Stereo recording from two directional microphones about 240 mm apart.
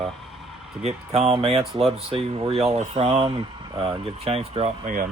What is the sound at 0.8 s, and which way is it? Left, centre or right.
Speech, right.